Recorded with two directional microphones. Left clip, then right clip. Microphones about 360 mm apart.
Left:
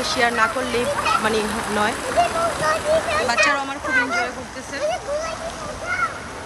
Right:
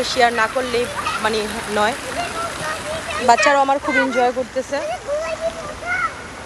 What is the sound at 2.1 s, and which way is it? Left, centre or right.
Speech, left.